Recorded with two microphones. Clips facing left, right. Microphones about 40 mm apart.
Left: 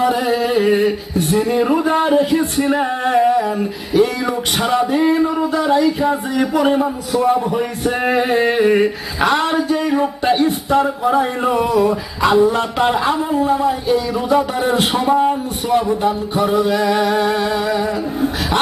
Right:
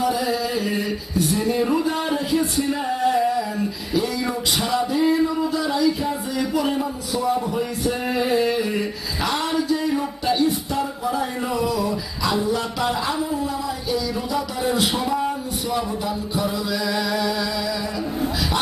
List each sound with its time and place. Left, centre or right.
0.0 s male singing: left